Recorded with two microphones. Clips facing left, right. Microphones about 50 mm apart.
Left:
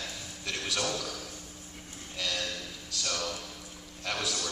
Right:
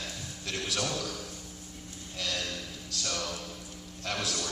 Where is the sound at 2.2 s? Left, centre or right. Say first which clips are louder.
Left 1 dB; centre.